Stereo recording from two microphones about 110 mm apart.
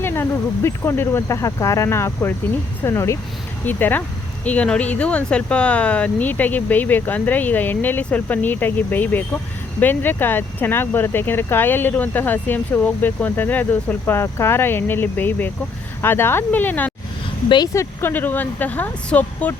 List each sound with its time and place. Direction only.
0.0 s speech: 20° left (ahead or behind)